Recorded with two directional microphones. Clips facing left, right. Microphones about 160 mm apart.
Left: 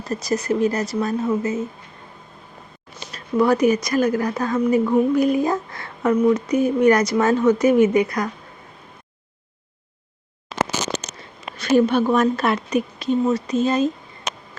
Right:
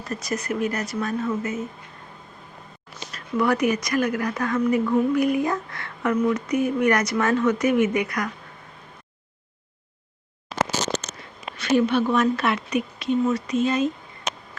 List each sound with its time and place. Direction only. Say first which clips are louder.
0.1 s speech: left 6 dB; 35° left (ahead or behind)
3.1 s speech: left 4 dB; 30° left (ahead or behind)
11.5 s speech: left 3 dB; 40° left (ahead or behind)